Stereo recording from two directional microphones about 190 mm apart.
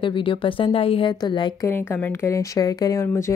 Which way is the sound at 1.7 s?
10° left (ahead or behind).